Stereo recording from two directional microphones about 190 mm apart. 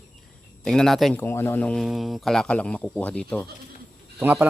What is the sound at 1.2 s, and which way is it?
Speech, 15° left (ahead or behind).